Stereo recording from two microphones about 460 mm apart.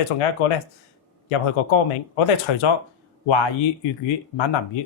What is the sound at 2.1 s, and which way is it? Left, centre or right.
Speech, left.